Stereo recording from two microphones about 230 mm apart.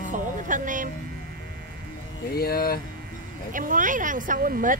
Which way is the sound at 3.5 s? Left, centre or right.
Right.